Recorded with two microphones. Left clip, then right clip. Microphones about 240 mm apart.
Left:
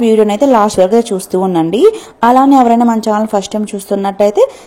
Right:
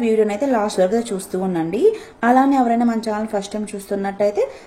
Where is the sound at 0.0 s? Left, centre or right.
Left.